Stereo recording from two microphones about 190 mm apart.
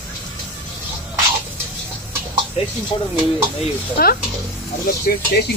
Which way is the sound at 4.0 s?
50° left (ahead or behind).